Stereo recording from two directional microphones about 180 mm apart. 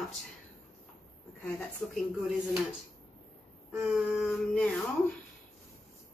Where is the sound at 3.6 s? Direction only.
5° right (ahead or behind).